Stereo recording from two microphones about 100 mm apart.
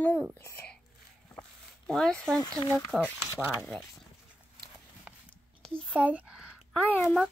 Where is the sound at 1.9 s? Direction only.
5° left (ahead or behind).